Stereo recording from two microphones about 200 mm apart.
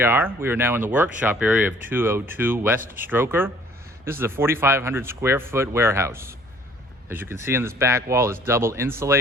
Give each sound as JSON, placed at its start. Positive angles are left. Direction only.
{"t": 0.0, "sound": "speech", "side_deg": -10}